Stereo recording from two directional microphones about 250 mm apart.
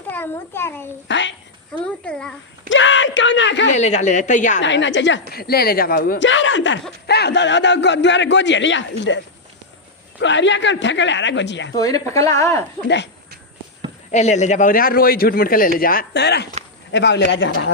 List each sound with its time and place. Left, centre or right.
0.1 s a child's voice: centre
1.0 s a woman's voice: left
1.8 s a child's voice: centre
2.6 s a man's voice: left
3.7 s a woman's voice: left
4.6 s a man's voice: left
11.7 s speech: centre
14.1 s a man's voice: left